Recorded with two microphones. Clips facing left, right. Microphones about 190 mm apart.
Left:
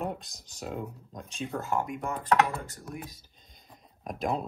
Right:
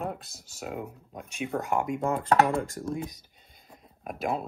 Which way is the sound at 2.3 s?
30° right (ahead or behind).